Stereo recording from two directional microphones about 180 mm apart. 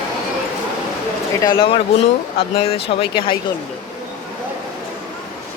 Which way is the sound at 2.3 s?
30° left (ahead or behind).